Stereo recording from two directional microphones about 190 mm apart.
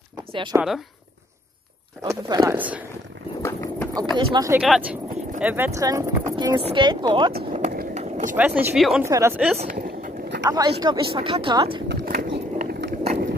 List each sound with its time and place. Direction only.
0.3 s speech: 25° right (ahead or behind)
2.0 s speech: 15° right (ahead or behind)
3.4 s a sound: 15° left (ahead or behind)
4.3 s speech: 20° right (ahead or behind)
4.6 s speech: 5° right (ahead or behind); by 7.3 s 25° right (ahead or behind)
7.5 s vehicle: 45° right (ahead or behind)
8.4 s speech: 10° right (ahead or behind)
9.0 s speech: 15° right (ahead or behind)
9.8 s a sound: 50° right (ahead or behind)
10.4 s speech: 20° right (ahead or behind)
11.9 s a sound: 50° right (ahead or behind)